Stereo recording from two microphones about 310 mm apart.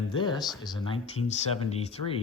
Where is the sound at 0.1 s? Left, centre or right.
Centre.